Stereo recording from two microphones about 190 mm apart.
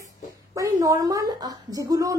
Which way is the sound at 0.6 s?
20° right (ahead or behind).